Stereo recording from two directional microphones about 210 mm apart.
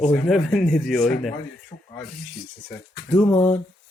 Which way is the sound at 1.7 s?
30° left (ahead or behind).